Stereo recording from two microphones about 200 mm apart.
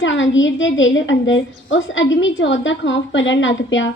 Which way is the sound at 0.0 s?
70° left (ahead or behind).